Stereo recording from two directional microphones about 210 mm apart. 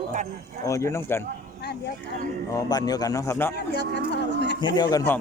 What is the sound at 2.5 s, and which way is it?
A man's voice, 20° left (ahead or behind).